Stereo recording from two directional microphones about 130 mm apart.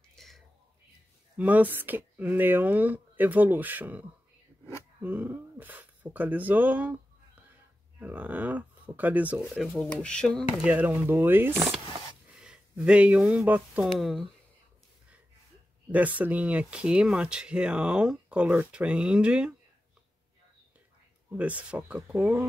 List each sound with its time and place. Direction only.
0.1 s whispering: centre (ahead or behind)
1.3 s speech: 10° right (ahead or behind)
5.0 s speech: 15° right (ahead or behind)
8.0 s speech: 10° right (ahead or behind)
9.5 s speech: centre (ahead or behind)
10.6 s speech: 10° right (ahead or behind)
13.9 s speech: centre (ahead or behind)
15.9 s speech: 10° right (ahead or behind)
21.4 s speech: 10° right (ahead or behind)